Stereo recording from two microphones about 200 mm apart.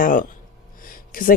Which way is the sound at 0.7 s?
45° left (ahead or behind).